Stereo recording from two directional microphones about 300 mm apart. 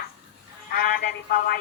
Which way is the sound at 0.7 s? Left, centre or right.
Left.